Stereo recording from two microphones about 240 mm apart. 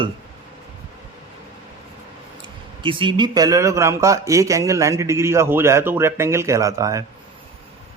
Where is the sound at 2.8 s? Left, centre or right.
Right.